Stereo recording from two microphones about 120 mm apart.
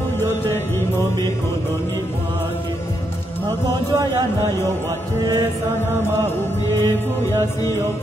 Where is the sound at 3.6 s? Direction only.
35° right (ahead or behind).